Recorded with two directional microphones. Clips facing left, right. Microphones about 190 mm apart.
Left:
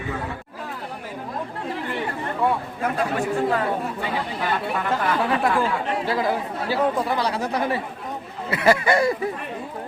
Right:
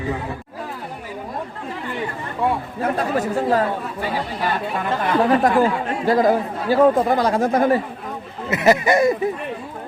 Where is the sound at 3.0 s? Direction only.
40° right (ahead or behind).